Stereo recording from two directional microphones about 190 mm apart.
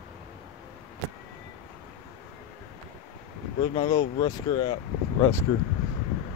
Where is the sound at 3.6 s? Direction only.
25° left (ahead or behind).